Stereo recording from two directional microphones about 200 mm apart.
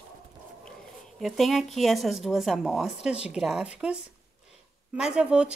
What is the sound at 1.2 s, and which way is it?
Speech, centre (ahead or behind).